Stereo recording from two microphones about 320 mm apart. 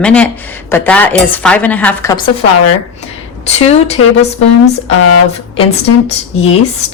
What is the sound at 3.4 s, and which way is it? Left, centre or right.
Speech, centre.